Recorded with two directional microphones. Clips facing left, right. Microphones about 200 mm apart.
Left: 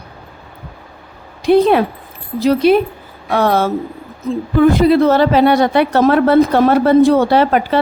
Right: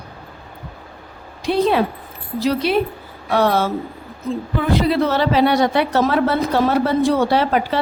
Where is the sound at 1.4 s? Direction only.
55° left (ahead or behind).